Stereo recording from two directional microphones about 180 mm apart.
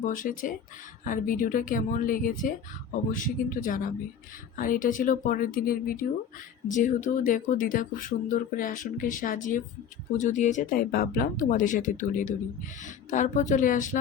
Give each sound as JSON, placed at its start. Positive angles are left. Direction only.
{"t": 0.0, "sound": "speech", "side_deg": 50}